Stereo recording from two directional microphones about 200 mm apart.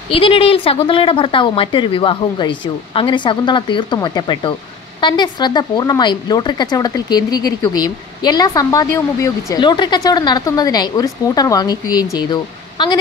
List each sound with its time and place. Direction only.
0.1 s speech: 25° left (ahead or behind)